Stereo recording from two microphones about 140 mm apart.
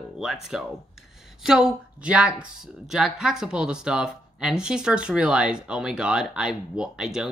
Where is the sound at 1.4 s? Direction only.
5° right (ahead or behind).